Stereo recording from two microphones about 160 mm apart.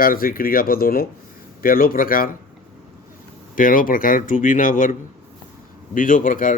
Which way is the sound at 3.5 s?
60° left (ahead or behind).